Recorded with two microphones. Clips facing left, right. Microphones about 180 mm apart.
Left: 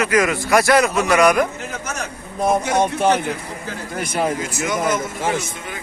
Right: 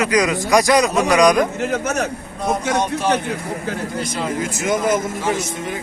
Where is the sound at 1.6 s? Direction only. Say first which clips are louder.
Right 8 dB; 65° right (ahead or behind).